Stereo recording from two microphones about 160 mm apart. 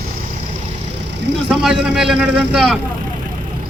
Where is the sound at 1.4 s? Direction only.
5° right (ahead or behind).